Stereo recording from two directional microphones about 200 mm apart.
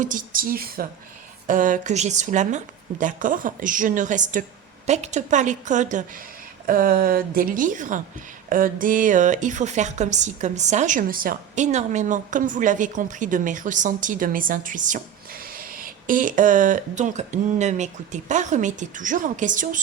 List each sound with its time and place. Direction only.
0.0 s a woman's voice: 40° right (ahead or behind)